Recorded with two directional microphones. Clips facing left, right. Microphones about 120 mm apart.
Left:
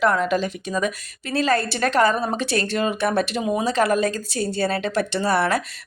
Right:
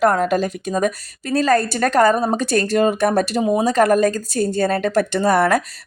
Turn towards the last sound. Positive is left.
turn(degrees=-45)  # may be behind; listen again after turning